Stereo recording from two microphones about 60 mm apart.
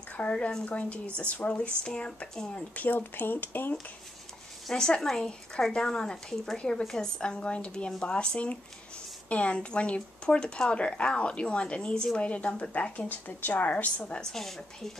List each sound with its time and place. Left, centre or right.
0.1 s a woman's voice: left
4.6 s a woman's voice: centre
14.3 s a woman's voice: centre